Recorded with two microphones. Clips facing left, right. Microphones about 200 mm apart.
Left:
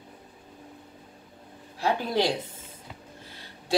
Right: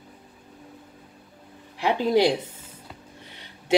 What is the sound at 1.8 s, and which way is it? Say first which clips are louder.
Speech: right 5 dB; 15° right (ahead or behind).